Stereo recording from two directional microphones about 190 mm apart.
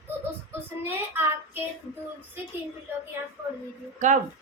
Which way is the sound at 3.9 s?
40° right (ahead or behind).